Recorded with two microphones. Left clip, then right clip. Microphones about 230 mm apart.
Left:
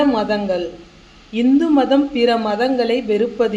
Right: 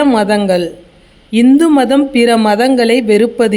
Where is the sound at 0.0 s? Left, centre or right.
Right.